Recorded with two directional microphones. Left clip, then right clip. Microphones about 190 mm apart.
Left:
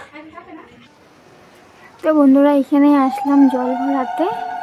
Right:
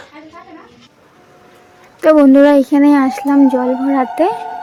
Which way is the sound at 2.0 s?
20° right (ahead or behind).